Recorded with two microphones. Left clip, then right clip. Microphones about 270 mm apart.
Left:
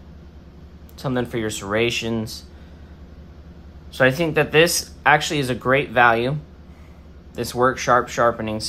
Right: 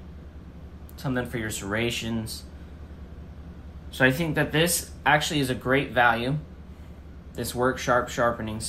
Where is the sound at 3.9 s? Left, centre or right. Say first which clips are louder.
Left 5 dB; left.